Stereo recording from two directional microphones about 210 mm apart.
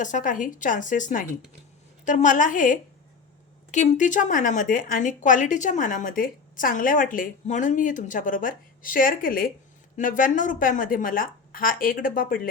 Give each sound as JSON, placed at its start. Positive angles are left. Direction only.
{"t": 0.0, "sound": "speech", "side_deg": 35}